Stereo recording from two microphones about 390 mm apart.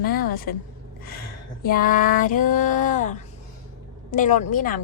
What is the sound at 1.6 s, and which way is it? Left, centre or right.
A woman's voice, left.